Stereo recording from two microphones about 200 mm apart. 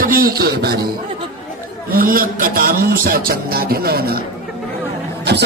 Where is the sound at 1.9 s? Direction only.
45° right (ahead or behind).